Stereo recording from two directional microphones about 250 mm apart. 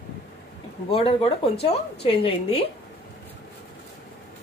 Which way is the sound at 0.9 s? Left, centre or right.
Left.